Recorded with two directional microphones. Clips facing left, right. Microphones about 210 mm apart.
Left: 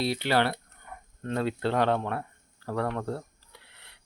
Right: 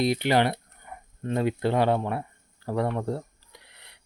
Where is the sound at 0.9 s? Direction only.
10° right (ahead or behind).